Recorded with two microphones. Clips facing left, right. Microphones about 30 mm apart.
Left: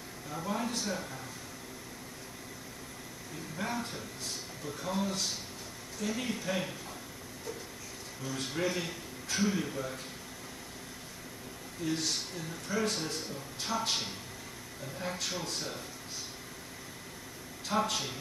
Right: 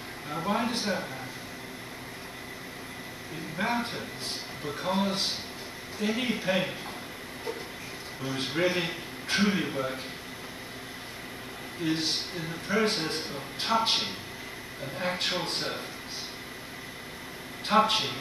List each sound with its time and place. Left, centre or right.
0.3 s speech: right
3.5 s speech: right
8.2 s a man's voice: right
11.8 s speech: right
17.6 s speech: right